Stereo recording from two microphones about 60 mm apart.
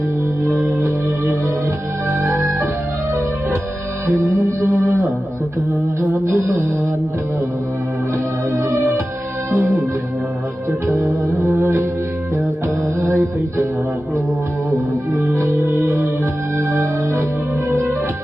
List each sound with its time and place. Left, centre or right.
2.0 s music: right
4.0 s music: right
6.0 s music: right
8.5 s music: right
13.0 s music: right
15.1 s music: right
17.7 s music: right